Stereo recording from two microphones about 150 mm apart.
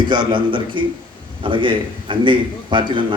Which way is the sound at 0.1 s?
35° right (ahead or behind).